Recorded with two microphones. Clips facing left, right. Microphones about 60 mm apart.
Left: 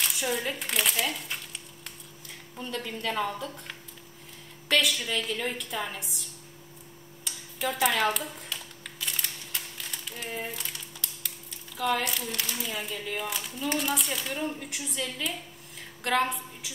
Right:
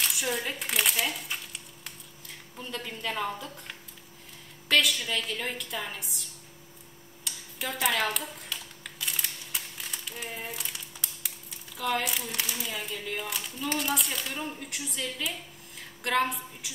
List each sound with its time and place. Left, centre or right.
0.0 s speech: centre
7.2 s a sound: centre
11.2 s a woman's voice: centre